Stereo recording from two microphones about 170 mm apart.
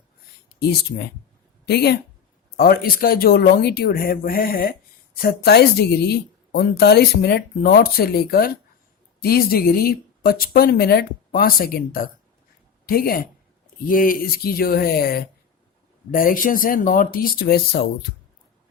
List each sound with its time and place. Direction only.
0.6 s speech: 70° left (ahead or behind)
2.6 s a woman's voice: 60° left (ahead or behind)